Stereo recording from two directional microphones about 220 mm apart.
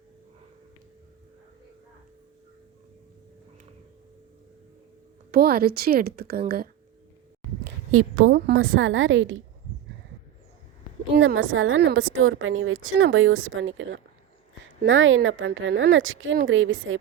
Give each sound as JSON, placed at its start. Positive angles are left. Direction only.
{"t": 5.3, "sound": "a woman's voice", "side_deg": -45}
{"t": 7.9, "sound": "a woman's voice", "side_deg": -80}
{"t": 8.3, "sound": "a woman's voice", "side_deg": -50}
{"t": 11.3, "sound": "a woman's voice", "side_deg": -70}